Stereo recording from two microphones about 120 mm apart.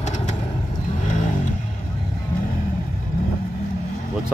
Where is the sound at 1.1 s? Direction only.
90° left.